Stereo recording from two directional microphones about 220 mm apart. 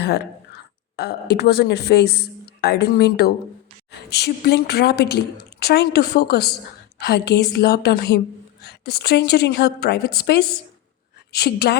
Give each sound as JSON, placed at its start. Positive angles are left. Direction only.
{"t": 0.0, "sound": "a woman's voice", "side_deg": 45}